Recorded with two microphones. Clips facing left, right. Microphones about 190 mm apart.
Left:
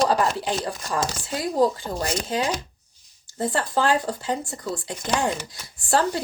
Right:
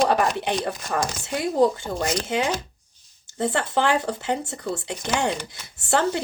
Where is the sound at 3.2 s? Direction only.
25° right (ahead or behind).